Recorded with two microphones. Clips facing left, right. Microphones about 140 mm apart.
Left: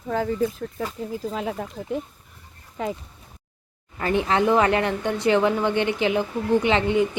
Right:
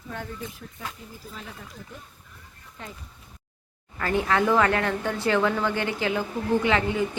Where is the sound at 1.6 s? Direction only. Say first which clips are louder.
Left 13 dB; 90° left.